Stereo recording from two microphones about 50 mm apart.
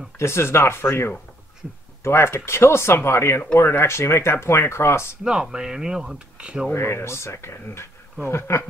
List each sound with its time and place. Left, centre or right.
0.2 s speech: left
5.2 s speech: centre
6.7 s speech: left